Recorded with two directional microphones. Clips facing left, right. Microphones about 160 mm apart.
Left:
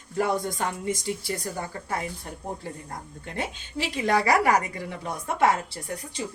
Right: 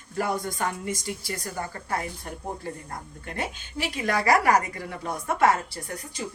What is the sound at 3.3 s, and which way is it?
A woman's voice, 25° left (ahead or behind).